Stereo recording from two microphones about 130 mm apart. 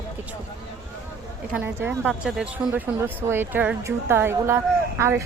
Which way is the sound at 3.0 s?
15° right (ahead or behind).